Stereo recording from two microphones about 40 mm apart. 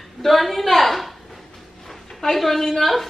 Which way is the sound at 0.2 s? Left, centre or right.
Centre.